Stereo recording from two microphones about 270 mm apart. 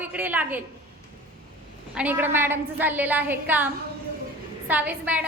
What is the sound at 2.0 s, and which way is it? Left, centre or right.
A woman's voice, centre.